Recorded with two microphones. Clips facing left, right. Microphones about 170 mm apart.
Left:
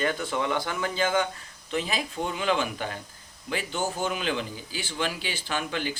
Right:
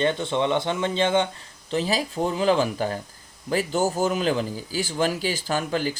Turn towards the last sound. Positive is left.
turn(degrees=-40)  # may be behind; listen again after turning